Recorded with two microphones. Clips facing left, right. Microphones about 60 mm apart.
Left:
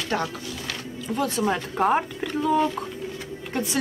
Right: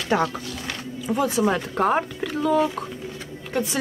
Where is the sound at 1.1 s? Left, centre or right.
Centre.